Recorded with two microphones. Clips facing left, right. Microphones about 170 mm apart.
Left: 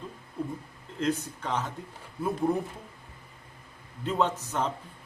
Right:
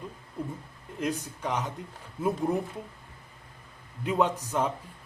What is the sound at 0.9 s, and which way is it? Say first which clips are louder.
Speech: left 2 dB; 15° right (ahead or behind).